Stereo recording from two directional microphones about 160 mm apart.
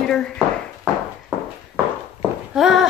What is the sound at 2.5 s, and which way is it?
Speech, centre (ahead or behind).